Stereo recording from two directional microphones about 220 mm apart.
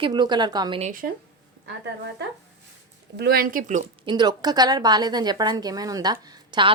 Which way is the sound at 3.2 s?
45° right (ahead or behind).